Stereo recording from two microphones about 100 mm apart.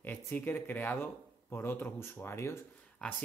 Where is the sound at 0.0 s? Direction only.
20° left (ahead or behind).